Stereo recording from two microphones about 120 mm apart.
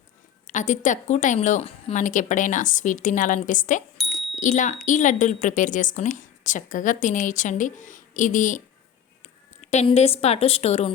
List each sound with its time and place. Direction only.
0.4 s a woman's voice: 90° left
9.2 s a sound: 70° left (ahead or behind)
9.9 s a woman's voice: 60° left (ahead or behind)